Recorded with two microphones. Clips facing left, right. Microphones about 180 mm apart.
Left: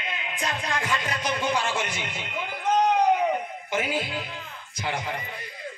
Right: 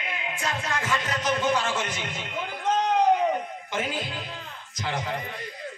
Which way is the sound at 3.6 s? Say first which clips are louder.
Left 4 dB; 10° left (ahead or behind).